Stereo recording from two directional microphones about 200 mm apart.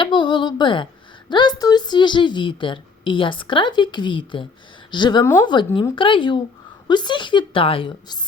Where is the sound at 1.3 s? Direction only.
20° left (ahead or behind).